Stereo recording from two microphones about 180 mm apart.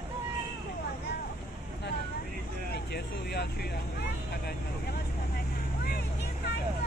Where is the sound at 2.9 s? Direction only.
65° left (ahead or behind).